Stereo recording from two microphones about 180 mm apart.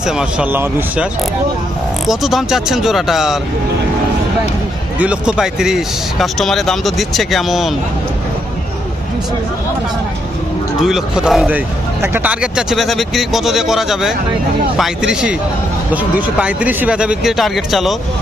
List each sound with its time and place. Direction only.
0.0 s speech: 5° right (ahead or behind)
2.0 s speech: centre (ahead or behind)
4.9 s speech: 5° right (ahead or behind)
10.8 s speech: 5° right (ahead or behind)